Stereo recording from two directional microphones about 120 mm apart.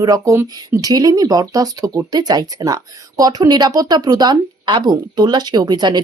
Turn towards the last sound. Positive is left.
turn(degrees=-35)  # may be behind; listen again after turning